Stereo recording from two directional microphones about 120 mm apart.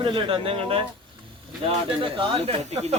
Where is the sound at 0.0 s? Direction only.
45° right (ahead or behind).